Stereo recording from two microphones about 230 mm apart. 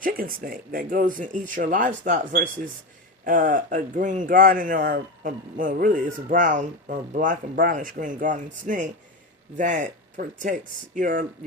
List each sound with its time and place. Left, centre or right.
0.0 s speech: right